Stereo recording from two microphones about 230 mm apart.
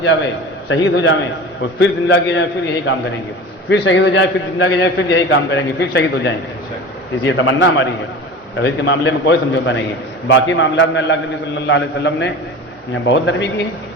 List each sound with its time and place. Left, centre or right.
0.7 s a man's voice: left